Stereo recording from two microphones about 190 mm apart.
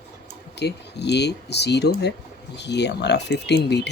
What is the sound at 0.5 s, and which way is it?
Speech, 60° left (ahead or behind).